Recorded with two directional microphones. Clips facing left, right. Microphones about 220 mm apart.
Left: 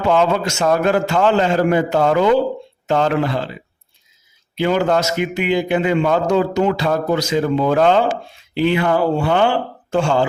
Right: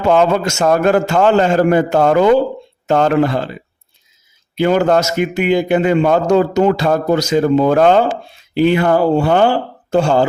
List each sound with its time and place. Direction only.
0.0 s a man's voice: 50° right (ahead or behind)
4.5 s a man's voice: 45° right (ahead or behind)